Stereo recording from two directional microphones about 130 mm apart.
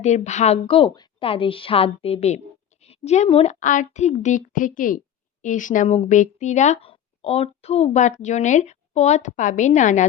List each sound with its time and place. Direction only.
0.0 s a woman's voice: 65° left (ahead or behind)
3.5 s speech: 75° left (ahead or behind)
5.4 s speech: 80° left
6.8 s a woman's voice: 50° left (ahead or behind); by 10.1 s 70° left (ahead or behind)